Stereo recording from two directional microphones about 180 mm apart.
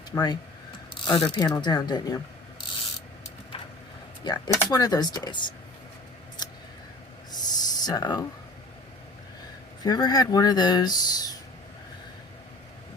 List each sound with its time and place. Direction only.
0.1 s speech: 25° left (ahead or behind)
4.2 s speech: 25° left (ahead or behind)
7.3 s a sound: 20° left (ahead or behind)
9.8 s speech: 20° left (ahead or behind)